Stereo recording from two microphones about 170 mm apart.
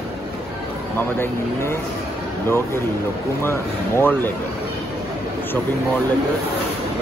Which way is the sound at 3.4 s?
15° left (ahead or behind).